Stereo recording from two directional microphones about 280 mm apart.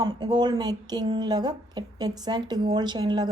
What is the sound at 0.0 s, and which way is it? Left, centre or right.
A woman's voice, centre.